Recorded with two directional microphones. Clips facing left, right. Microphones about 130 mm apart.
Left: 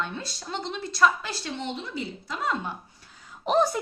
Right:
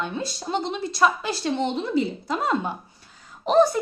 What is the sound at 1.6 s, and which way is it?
Speech, 35° right (ahead or behind).